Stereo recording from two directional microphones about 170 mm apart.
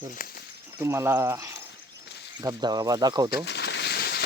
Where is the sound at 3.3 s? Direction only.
85° left; by 4.2 s 70° left (ahead or behind).